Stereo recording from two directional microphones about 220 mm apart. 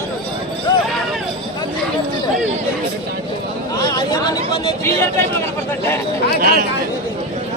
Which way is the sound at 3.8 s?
20° left (ahead or behind).